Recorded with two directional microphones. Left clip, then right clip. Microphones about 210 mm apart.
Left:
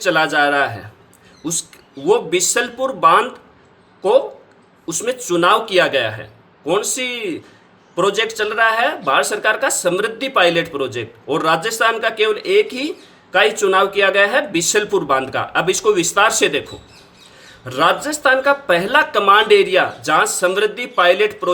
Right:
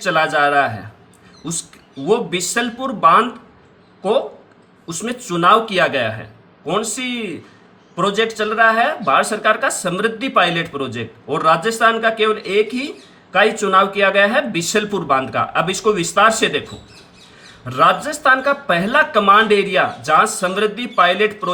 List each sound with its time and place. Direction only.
0.0 s speech: 50° left (ahead or behind)
2.0 s speech: 50° left (ahead or behind)
4.9 s speech: 50° left (ahead or behind)
17.7 s speech: 55° left (ahead or behind)